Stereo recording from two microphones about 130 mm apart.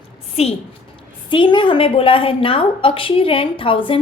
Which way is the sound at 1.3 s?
40° left (ahead or behind).